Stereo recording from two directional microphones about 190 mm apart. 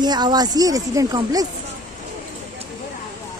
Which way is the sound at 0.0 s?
20° right (ahead or behind).